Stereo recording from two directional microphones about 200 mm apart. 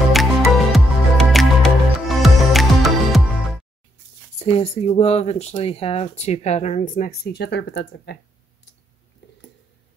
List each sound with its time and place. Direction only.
0.1 s music: centre (ahead or behind)
4.4 s speech: 30° left (ahead or behind); by 8.2 s 60° left (ahead or behind)
9.2 s a sound: 60° left (ahead or behind)